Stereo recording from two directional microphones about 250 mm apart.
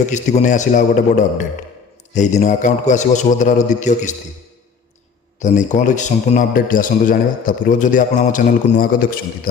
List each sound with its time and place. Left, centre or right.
0.0 s a man's voice: left
5.4 s a man's voice: left